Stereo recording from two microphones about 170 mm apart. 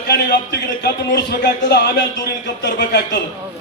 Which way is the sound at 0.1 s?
75° left (ahead or behind).